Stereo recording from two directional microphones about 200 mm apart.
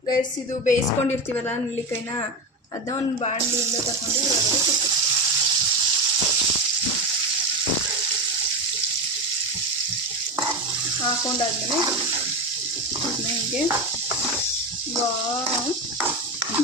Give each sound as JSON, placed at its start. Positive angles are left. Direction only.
{"t": 0.2, "sound": "a woman's voice", "side_deg": 40}